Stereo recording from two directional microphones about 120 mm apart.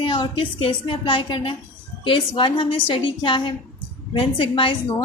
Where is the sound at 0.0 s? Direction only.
45° left (ahead or behind).